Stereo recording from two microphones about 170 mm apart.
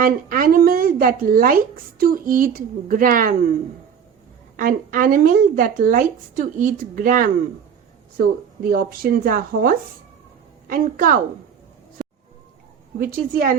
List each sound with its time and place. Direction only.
0.0 s speech: 55° right (ahead or behind)
4.5 s a woman's voice: 55° right (ahead or behind)
13.0 s speech: 60° right (ahead or behind)